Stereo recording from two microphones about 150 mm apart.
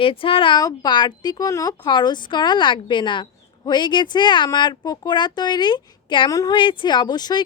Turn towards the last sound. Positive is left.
turn(degrees=30)  # may be behind; listen again after turning